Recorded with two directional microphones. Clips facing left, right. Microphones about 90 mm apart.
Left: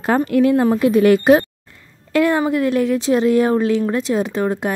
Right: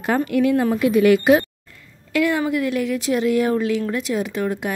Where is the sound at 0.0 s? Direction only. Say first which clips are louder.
Left 3 dB; 35° left (ahead or behind).